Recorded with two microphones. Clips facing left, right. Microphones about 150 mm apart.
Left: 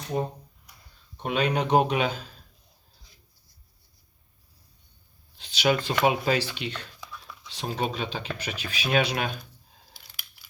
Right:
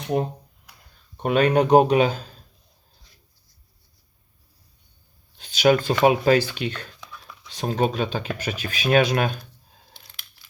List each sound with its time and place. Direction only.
0.0 s speech: 75° right (ahead or behind)
1.1 s speech: 50° right (ahead or behind)
5.4 s speech: 45° right (ahead or behind)
10.4 s coin: 10° left (ahead or behind)